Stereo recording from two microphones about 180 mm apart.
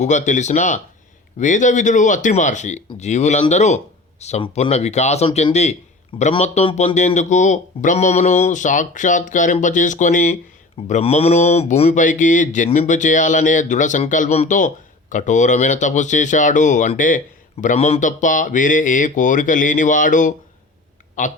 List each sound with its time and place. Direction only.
0.0 s speech: 40° left (ahead or behind)